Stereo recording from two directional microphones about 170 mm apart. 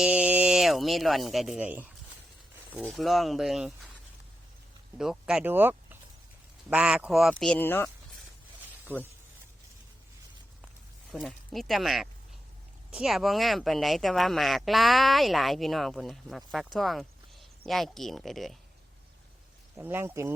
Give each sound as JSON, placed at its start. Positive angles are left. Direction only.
{"t": 0.0, "sound": "speech", "side_deg": -10}
{"t": 2.8, "sound": "speech", "side_deg": 0}
{"t": 4.9, "sound": "speech", "side_deg": -5}
{"t": 8.9, "sound": "speech", "side_deg": -10}
{"t": 11.1, "sound": "speech", "side_deg": 0}
{"t": 19.8, "sound": "speech", "side_deg": -10}